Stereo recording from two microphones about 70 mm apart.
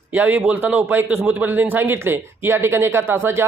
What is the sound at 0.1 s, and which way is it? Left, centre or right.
Speech, right.